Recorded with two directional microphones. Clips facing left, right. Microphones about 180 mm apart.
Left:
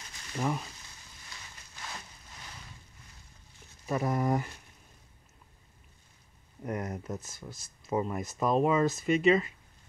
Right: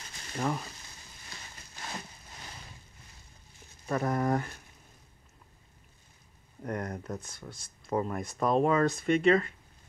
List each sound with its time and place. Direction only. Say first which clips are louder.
0.4 s speech: even; 5° left (ahead or behind)
1.3 s a sound: right 2 dB; 35° right (ahead or behind)
3.8 s speech: even; 5° left (ahead or behind)
6.6 s speech: even; 5° left (ahead or behind)